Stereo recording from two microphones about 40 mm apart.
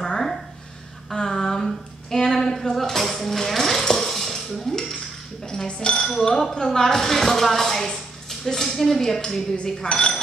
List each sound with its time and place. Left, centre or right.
0.0 s a sound: centre
5.7 s speech: left
9.6 s speech: left